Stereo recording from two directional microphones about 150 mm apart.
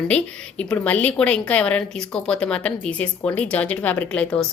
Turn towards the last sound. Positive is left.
turn(degrees=5)  # may be behind; listen again after turning